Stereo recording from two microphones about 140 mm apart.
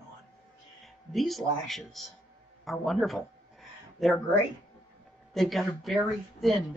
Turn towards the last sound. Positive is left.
turn(degrees=0)  # may be behind; listen again after turning